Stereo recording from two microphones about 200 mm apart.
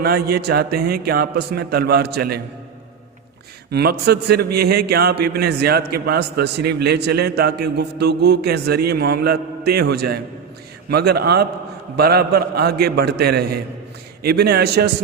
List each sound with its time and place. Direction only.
0.0 s a man's voice: 50° right (ahead or behind)
3.7 s a man's voice: 50° right (ahead or behind)